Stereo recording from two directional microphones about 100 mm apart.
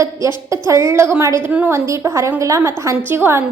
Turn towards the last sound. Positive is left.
turn(degrees=-25)  # may be behind; listen again after turning